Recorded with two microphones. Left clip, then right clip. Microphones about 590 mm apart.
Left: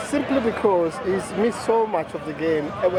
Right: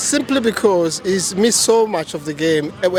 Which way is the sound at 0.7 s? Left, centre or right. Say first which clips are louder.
Right 4 dB; right.